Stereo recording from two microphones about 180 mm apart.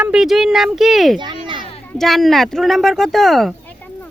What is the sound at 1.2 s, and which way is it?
Speech, 25° right (ahead or behind).